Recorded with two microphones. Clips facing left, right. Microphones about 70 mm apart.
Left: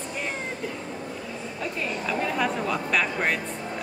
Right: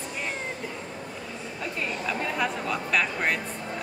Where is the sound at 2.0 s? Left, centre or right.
Centre.